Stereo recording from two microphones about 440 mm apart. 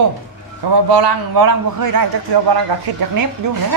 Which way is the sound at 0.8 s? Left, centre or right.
Right.